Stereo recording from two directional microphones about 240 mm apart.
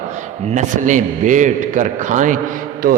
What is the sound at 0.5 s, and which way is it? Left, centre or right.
A man's voice, right.